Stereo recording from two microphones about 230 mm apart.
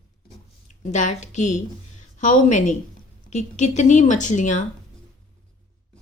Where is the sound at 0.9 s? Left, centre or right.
Left.